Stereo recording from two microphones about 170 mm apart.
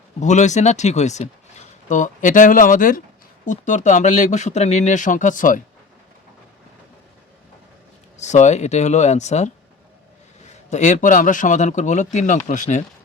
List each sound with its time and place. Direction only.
0.2 s speech: 45° left (ahead or behind)
8.2 s speech: 45° left (ahead or behind)
10.7 s speech: 45° left (ahead or behind)